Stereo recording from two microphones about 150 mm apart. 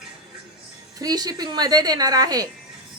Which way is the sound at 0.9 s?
25° right (ahead or behind).